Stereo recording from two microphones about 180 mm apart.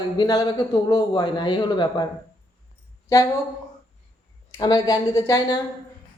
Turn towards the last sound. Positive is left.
turn(degrees=20)  # may be behind; listen again after turning